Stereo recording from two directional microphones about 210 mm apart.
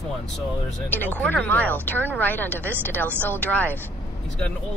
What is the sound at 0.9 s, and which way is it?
Speech, 10° left (ahead or behind).